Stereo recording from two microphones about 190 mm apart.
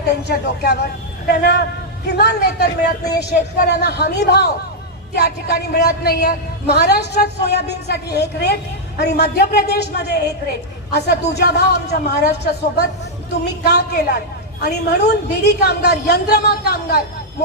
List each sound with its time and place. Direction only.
0.0 s a man's voice: 60° left (ahead or behind)